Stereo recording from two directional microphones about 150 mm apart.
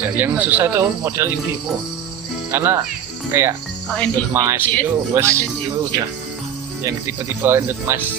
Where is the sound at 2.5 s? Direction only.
15° right (ahead or behind).